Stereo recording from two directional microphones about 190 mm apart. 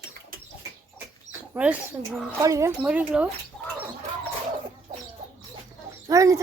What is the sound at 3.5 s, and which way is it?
Chicken, 5° left (ahead or behind).